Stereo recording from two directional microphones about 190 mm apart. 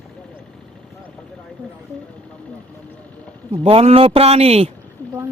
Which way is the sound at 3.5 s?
30° right (ahead or behind).